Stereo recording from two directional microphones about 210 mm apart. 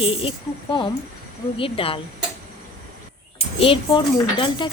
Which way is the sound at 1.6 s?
25° left (ahead or behind).